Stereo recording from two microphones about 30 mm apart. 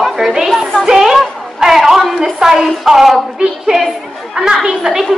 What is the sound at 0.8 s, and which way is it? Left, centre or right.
Music, centre.